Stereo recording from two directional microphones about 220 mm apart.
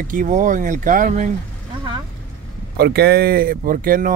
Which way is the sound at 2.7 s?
45° right (ahead or behind).